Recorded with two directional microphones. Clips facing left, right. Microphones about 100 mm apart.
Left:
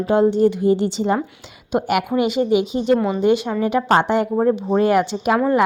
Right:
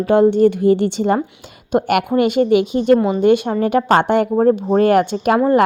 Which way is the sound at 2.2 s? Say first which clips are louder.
Right 4 dB; 55° right (ahead or behind).